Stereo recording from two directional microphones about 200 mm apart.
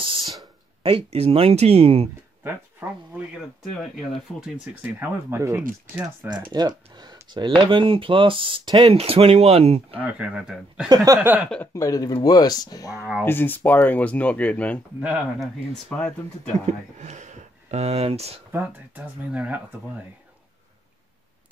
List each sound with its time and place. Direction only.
0.4 s speech: 25° right (ahead or behind)
4.3 s speech: 5° left (ahead or behind)
4.9 s speech: 10° right (ahead or behind); by 9.9 s 30° right (ahead or behind)
9.9 s speech: 5° right (ahead or behind)
11.4 s speech: 5° left (ahead or behind)
11.7 s speech: 15° left (ahead or behind)
15.0 s speech: 5° right (ahead or behind)
16.6 s speech: 35° right (ahead or behind)
18.5 s speech: 10° right (ahead or behind)